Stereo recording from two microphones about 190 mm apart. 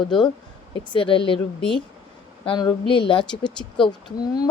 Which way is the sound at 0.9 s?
25° left (ahead or behind).